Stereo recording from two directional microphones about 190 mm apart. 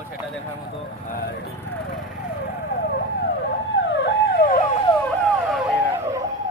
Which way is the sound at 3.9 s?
65° left (ahead or behind).